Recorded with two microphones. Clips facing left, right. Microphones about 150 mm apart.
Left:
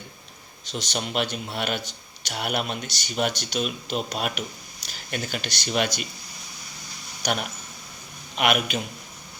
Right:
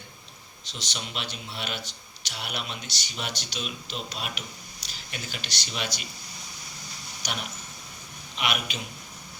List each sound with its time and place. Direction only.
0.6 s speech: 50° left (ahead or behind)
7.2 s speech: 50° left (ahead or behind)